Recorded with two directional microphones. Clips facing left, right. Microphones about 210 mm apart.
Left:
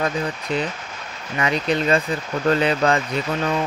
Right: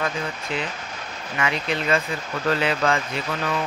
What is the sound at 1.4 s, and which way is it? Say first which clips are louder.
Speech: left 5 dB; 35° left (ahead or behind).